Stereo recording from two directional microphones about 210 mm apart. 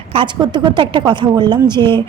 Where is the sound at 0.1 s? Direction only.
25° right (ahead or behind).